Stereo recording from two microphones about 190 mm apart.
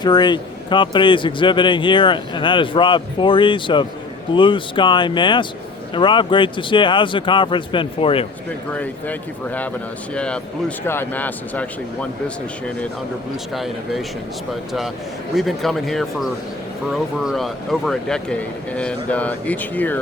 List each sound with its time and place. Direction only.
0.0 s a man's voice: 25° left (ahead or behind)
8.7 s speech: 10° left (ahead or behind)
13.5 s speech: centre (ahead or behind)
15.4 s speech: centre (ahead or behind)